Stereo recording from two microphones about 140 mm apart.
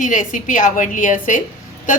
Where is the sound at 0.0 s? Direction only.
65° left (ahead or behind).